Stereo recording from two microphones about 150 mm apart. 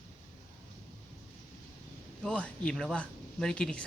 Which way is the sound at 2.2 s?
10° left (ahead or behind).